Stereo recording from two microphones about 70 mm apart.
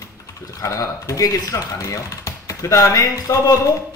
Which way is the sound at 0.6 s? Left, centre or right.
Left.